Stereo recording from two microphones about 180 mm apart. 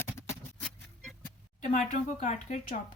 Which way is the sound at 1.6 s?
45° left (ahead or behind).